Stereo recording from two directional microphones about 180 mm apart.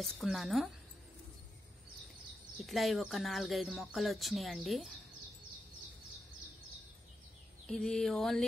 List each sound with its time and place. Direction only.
0.0 s speech: centre (ahead or behind)
2.6 s speech: centre (ahead or behind)
7.6 s speech: 5° left (ahead or behind)